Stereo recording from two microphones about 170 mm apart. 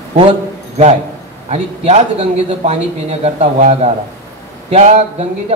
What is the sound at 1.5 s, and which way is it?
Speech, 40° right (ahead or behind).